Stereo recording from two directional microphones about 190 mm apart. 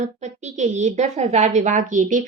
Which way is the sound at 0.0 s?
40° right (ahead or behind).